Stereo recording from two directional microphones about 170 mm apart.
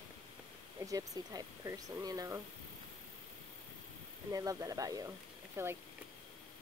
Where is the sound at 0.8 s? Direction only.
20° right (ahead or behind).